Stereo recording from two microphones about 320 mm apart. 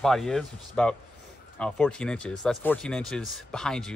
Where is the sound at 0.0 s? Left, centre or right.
Centre.